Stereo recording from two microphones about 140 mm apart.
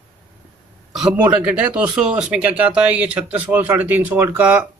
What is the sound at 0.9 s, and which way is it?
Speech, 5° right (ahead or behind).